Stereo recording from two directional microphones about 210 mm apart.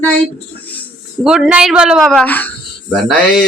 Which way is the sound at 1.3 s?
5° right (ahead or behind).